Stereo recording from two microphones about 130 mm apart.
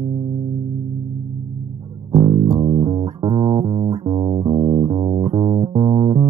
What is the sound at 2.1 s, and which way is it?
Bass guitar, 35° right (ahead or behind).